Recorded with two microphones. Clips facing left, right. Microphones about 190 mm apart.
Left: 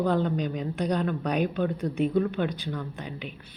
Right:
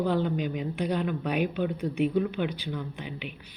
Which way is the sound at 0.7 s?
40° left (ahead or behind).